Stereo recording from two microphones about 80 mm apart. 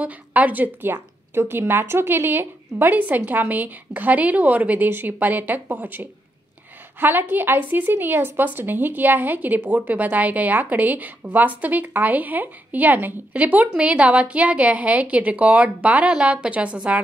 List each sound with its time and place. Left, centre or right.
0.0 s a woman's voice: centre